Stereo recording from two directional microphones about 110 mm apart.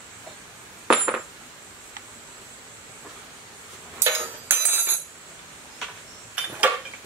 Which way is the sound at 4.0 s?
20° right (ahead or behind).